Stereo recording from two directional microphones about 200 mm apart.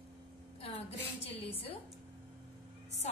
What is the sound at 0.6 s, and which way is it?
A woman's voice, 30° left (ahead or behind).